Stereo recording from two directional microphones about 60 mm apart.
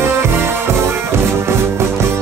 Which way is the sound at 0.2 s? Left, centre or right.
Right.